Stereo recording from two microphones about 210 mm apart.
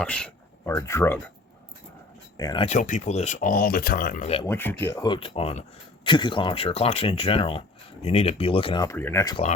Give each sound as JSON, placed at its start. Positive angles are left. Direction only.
{"t": 0.0, "sound": "a sound", "side_deg": 5}
{"t": 0.7, "sound": "speech", "side_deg": 15}
{"t": 2.4, "sound": "speech", "side_deg": 20}
{"t": 2.6, "sound": "speech", "side_deg": 35}
{"t": 4.4, "sound": "speech", "side_deg": 10}